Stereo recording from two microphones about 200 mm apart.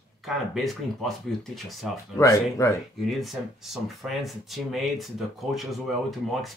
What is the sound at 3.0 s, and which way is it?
Speech, centre (ahead or behind).